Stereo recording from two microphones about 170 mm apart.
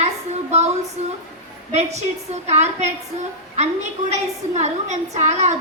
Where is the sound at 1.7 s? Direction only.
40° right (ahead or behind).